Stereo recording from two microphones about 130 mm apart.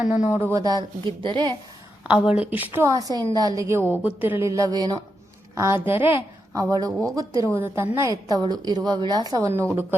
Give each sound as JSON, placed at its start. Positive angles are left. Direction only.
{"t": 0.0, "sound": "a woman's voice", "side_deg": -10}
{"t": 0.3, "sound": "a woman's voice", "side_deg": -25}
{"t": 2.0, "sound": "a woman's voice", "side_deg": -5}
{"t": 2.8, "sound": "a woman's voice", "side_deg": -25}
{"t": 6.6, "sound": "a woman's voice", "side_deg": -30}
{"t": 9.5, "sound": "a woman's voice", "side_deg": -20}